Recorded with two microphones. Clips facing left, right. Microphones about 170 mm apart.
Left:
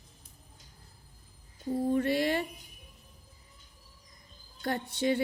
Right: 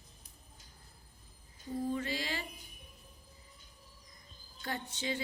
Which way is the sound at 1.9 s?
60° left (ahead or behind).